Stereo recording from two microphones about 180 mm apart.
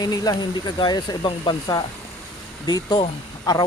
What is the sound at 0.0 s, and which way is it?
Speech, 20° left (ahead or behind).